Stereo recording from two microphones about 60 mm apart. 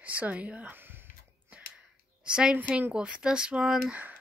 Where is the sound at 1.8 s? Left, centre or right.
Centre.